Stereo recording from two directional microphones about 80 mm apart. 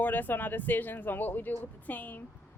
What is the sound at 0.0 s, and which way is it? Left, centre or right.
A woman's voice, left.